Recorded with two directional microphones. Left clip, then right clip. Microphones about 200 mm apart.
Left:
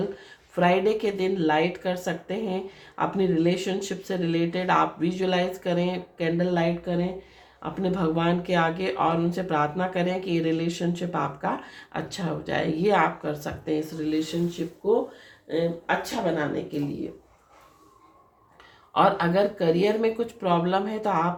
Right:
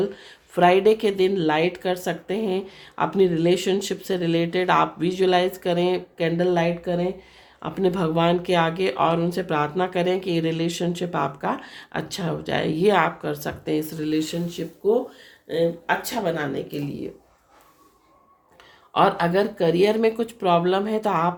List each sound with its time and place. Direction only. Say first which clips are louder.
0.2 s speech: right 5 dB; 45° right (ahead or behind)
18.9 s speech: right 2 dB; 50° right (ahead or behind)